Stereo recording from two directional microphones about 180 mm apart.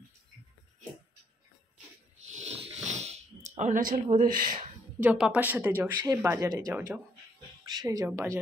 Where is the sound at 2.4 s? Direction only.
35° right (ahead or behind).